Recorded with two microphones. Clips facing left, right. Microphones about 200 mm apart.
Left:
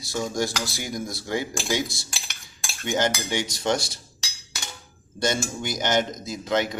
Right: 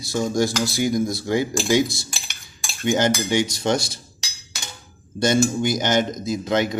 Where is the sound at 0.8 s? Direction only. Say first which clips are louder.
Right 10 dB; 15° right (ahead or behind).